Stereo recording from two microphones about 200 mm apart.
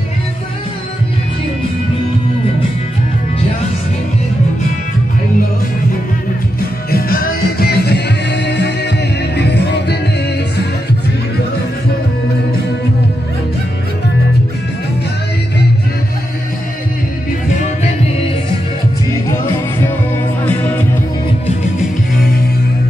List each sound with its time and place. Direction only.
6.9 s music: 45° left (ahead or behind)
17.5 s music: 35° left (ahead or behind)
20.4 s music: 10° left (ahead or behind)